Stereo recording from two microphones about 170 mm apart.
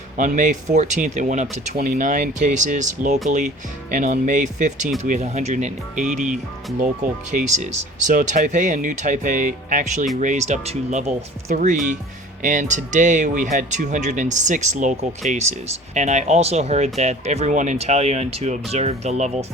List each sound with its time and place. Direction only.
0.2 s speech: 50° right (ahead or behind)